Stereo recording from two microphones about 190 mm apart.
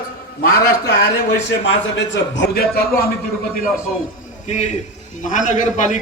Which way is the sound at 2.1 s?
65° left (ahead or behind).